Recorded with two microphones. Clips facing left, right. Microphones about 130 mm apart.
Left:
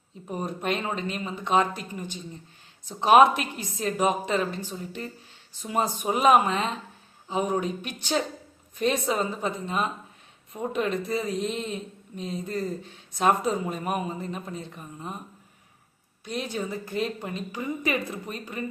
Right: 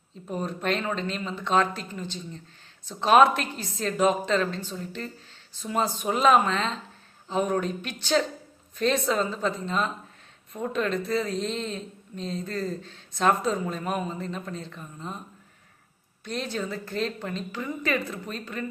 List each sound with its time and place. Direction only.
0.3 s speech: 15° left (ahead or behind)
16.2 s speech: 10° left (ahead or behind)